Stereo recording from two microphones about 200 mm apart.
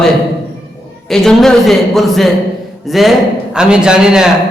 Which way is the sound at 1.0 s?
Centre (ahead or behind).